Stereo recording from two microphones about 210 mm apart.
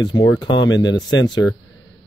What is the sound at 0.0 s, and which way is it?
Speech, 20° left (ahead or behind).